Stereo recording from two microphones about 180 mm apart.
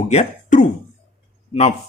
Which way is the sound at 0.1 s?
40° left (ahead or behind).